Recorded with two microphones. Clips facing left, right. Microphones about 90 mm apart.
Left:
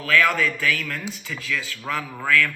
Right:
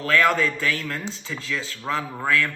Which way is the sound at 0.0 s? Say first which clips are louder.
Right 1 dB; 30° right (ahead or behind).